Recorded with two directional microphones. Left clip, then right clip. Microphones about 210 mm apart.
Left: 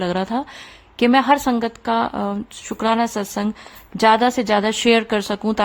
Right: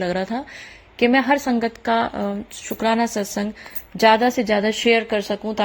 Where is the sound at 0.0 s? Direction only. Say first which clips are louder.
Left 2 dB; 20° left (ahead or behind).